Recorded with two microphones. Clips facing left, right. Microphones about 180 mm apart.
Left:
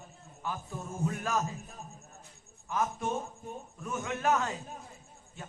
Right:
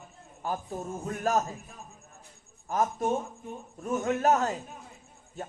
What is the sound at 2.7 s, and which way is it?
A man's voice, 40° right (ahead or behind).